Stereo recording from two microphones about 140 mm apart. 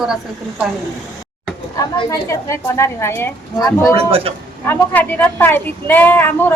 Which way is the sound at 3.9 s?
45° right (ahead or behind).